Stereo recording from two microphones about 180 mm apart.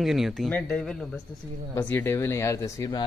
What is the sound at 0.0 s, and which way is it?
Speech, centre (ahead or behind).